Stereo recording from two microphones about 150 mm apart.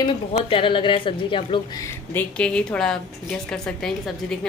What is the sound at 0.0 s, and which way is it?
Speech, 40° left (ahead or behind).